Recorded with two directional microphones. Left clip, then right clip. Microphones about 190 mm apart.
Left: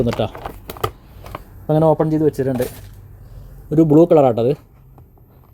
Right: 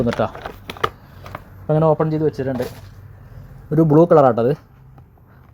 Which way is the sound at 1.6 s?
35° left (ahead or behind).